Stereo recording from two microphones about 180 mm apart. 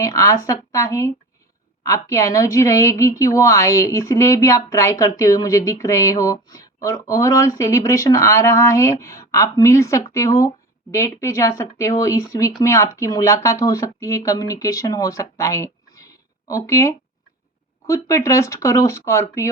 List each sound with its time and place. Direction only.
0.0 s a woman's voice: 20° left (ahead or behind)